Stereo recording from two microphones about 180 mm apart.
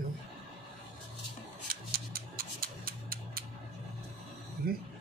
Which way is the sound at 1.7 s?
55° right (ahead or behind).